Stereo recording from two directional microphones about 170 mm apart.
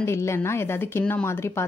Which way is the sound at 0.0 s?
15° left (ahead or behind).